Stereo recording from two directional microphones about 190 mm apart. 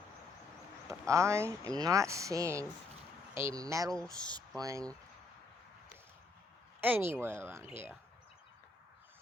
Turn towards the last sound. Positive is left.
turn(degrees=-15)  # may be behind; listen again after turning